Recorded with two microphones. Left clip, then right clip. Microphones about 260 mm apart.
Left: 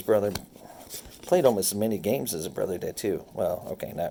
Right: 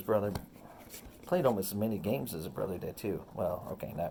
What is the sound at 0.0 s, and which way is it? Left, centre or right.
Speech, left.